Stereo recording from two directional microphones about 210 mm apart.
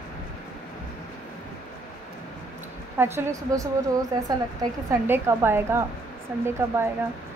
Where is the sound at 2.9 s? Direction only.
10° right (ahead or behind).